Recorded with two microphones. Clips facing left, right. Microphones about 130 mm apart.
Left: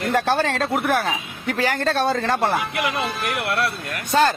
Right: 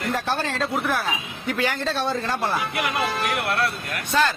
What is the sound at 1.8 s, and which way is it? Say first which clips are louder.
Speech: left 4 dB; 55° left (ahead or behind).